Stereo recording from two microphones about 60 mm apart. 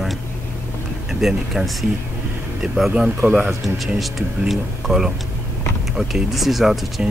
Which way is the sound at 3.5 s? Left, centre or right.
Centre.